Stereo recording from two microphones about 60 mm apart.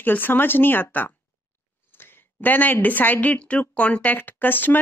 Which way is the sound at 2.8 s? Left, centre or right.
Left.